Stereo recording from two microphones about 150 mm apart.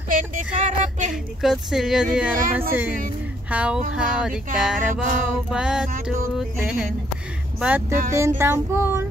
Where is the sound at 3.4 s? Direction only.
10° right (ahead or behind).